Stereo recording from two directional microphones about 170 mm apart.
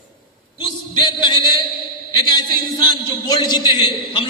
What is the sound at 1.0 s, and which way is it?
A man's voice, 30° left (ahead or behind).